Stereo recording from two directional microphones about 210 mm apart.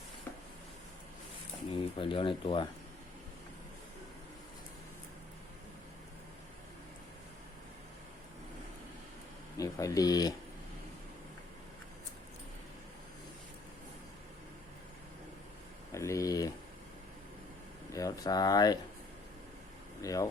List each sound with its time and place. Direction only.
1.7 s speech: 25° left (ahead or behind)
9.6 s speech: 15° left (ahead or behind)
15.9 s a sound: 15° left (ahead or behind)
17.9 s speech: 15° left (ahead or behind)
20.0 s speech: 15° left (ahead or behind)